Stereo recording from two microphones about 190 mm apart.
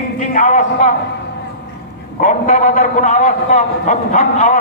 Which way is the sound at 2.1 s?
45° left (ahead or behind).